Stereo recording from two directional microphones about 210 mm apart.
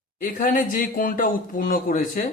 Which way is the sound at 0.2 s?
40° left (ahead or behind).